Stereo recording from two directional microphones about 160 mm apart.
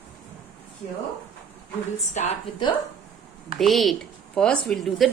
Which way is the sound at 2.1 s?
45° left (ahead or behind).